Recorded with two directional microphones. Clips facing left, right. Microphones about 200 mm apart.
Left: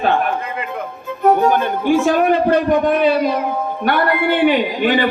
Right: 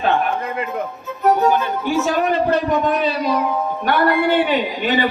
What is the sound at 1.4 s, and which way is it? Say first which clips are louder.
A man's voice: left 2 dB; 50° left (ahead or behind).